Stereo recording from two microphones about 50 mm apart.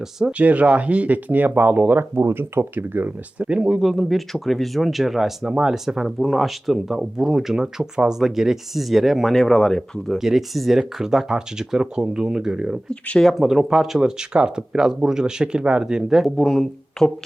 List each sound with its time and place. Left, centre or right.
0.3 s speech: right
2.0 s speech: right
3.3 s speech: right
3.8 s speech: centre
10.2 s speech: centre
12.9 s speech: left
13.2 s speech: centre
16.3 s speech: centre